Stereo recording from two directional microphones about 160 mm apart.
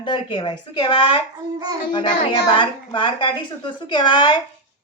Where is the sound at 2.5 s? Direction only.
30° left (ahead or behind).